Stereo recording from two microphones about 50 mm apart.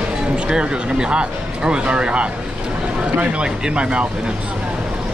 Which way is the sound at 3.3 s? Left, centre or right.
Right.